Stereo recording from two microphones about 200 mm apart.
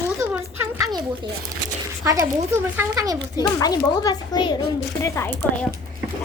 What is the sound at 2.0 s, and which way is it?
Speech, 15° right (ahead or behind).